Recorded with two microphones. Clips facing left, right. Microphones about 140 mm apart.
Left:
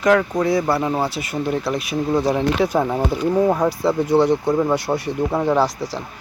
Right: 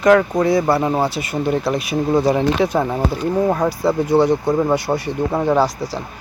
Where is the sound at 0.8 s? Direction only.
25° right (ahead or behind).